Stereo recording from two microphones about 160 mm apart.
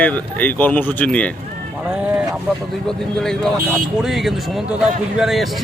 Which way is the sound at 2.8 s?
5° left (ahead or behind).